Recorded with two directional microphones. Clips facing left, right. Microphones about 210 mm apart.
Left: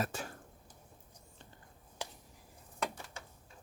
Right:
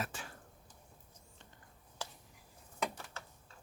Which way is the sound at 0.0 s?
40° left (ahead or behind).